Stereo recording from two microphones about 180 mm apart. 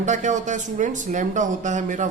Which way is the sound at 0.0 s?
40° right (ahead or behind).